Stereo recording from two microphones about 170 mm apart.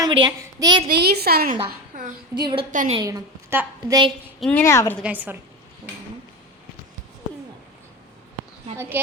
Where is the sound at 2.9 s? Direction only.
20° right (ahead or behind).